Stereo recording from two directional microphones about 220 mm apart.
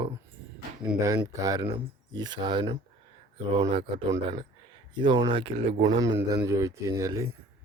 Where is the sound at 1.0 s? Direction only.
15° right (ahead or behind).